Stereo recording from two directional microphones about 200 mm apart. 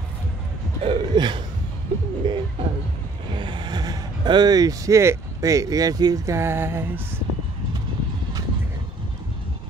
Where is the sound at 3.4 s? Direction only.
25° right (ahead or behind).